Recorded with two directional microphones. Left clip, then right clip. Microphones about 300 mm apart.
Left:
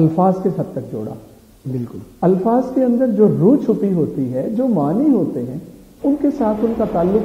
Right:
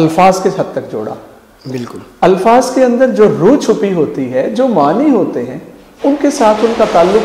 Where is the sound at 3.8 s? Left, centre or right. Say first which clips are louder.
Right 6 dB; centre.